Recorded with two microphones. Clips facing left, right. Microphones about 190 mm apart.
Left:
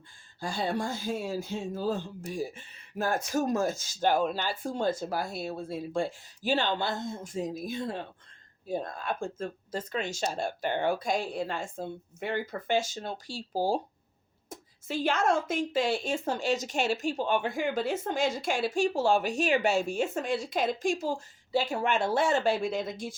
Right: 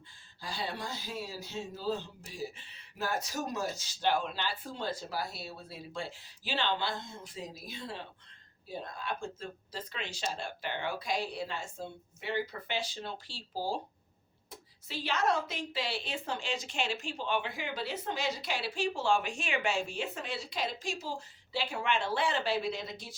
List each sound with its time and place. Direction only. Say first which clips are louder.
0.3 s a woman's voice: left 8 dB; 45° left (ahead or behind)